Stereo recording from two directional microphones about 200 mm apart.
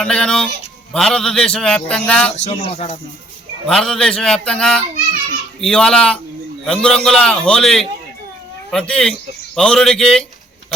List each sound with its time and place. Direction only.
0.0 s speech: 5° left (ahead or behind)
2.3 s speech: 30° left (ahead or behind)
3.7 s speech: centre (ahead or behind)